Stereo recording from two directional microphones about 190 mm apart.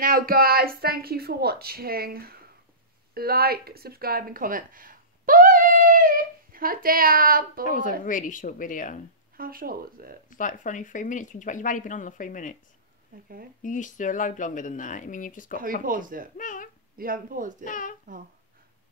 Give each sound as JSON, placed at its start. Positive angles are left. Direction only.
{"t": 0.0, "sound": "speech", "side_deg": -50}
{"t": 7.6, "sound": "speech", "side_deg": 45}
{"t": 9.4, "sound": "speech", "side_deg": -50}
{"t": 10.3, "sound": "speech", "side_deg": 45}
{"t": 13.6, "sound": "speech", "side_deg": 40}
{"t": 15.6, "sound": "speech", "side_deg": -45}
{"t": 16.3, "sound": "speech", "side_deg": 45}
{"t": 16.9, "sound": "speech", "side_deg": -50}
{"t": 17.6, "sound": "speech", "side_deg": 45}